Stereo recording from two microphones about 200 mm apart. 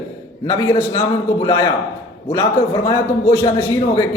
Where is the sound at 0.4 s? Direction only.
15° left (ahead or behind).